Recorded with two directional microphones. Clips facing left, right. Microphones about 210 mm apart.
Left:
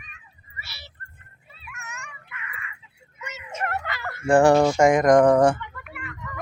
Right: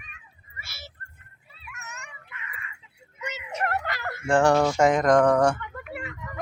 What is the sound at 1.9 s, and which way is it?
Dog, 20° right (ahead or behind).